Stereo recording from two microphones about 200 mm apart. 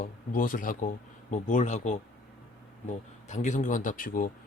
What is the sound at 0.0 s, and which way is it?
Speech, 40° left (ahead or behind).